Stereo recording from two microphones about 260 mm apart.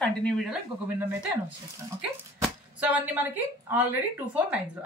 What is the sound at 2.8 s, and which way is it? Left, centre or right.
Speech, centre.